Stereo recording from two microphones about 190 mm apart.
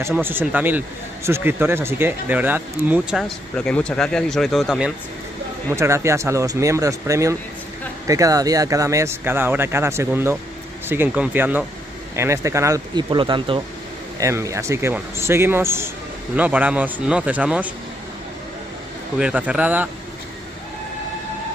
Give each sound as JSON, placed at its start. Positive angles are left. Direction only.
{"t": 0.0, "sound": "a man's voice", "side_deg": -10}
{"t": 5.7, "sound": "a man's voice", "side_deg": -15}
{"t": 14.2, "sound": "a man's voice", "side_deg": -15}
{"t": 19.1, "sound": "a man's voice", "side_deg": -5}